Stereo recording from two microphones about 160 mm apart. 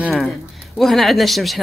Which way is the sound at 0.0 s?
Centre (ahead or behind).